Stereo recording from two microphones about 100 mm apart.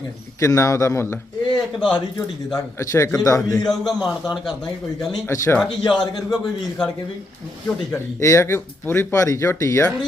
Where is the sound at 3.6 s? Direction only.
Centre (ahead or behind).